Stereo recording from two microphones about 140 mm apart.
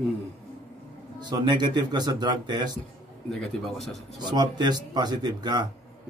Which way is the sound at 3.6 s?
Centre (ahead or behind).